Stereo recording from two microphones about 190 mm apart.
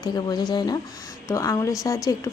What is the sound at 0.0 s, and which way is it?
A woman's voice, 20° left (ahead or behind).